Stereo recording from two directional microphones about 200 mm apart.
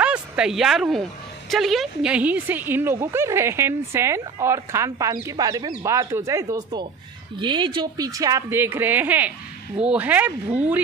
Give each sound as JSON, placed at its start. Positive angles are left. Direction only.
{"t": 0.0, "sound": "a woman's voice", "side_deg": -5}